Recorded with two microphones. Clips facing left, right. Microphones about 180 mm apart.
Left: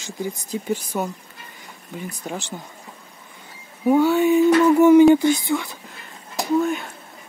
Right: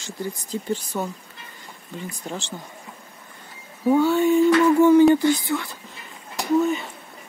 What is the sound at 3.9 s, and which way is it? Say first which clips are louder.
Speech: left 1 dB; 10° left (ahead or behind).